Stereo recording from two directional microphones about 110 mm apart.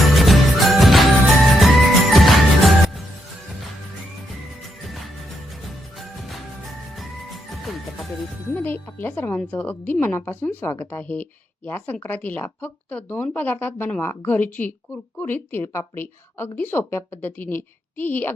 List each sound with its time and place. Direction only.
0.0 s music: centre (ahead or behind)
5.6 s music: centre (ahead or behind)
8.5 s music: 20° left (ahead or behind)
9.4 s a woman's voice: 15° left (ahead or behind)